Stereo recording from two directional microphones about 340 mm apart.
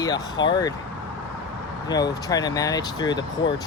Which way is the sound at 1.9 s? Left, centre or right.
Centre.